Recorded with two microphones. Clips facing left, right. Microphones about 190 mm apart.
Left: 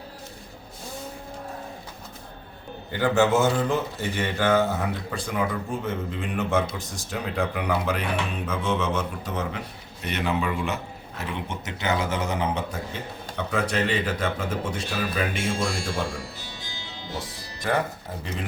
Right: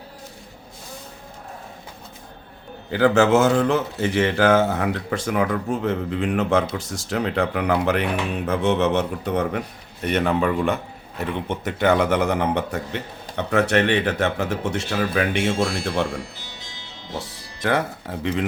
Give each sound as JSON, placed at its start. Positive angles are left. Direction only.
{"t": 2.9, "sound": "a man's voice", "side_deg": -80}
{"t": 17.6, "sound": "speech", "side_deg": -90}